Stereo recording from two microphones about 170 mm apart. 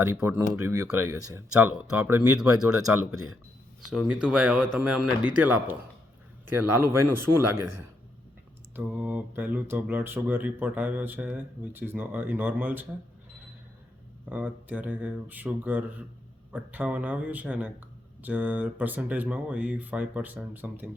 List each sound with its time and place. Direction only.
0.0 s a man's voice: 15° right (ahead or behind)
6.7 s speech: 15° right (ahead or behind)
8.7 s speech: 10° right (ahead or behind)
14.3 s speech: 10° right (ahead or behind)